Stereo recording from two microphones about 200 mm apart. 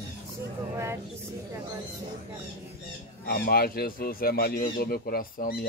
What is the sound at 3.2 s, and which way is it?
Speech, 50° left (ahead or behind).